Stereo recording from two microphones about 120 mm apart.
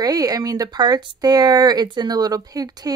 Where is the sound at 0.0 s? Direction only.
30° right (ahead or behind).